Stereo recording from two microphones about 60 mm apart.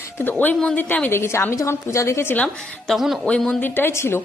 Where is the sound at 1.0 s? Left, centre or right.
Left.